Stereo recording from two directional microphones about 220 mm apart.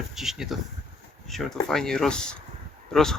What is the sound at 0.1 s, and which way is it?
Speech, centre (ahead or behind).